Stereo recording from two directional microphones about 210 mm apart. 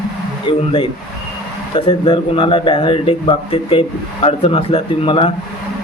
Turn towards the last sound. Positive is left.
turn(degrees=25)  # may be behind; listen again after turning